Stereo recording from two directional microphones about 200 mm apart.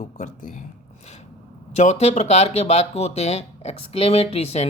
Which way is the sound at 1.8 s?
35° left (ahead or behind).